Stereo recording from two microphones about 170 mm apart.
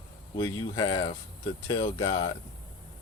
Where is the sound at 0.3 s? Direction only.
25° left (ahead or behind).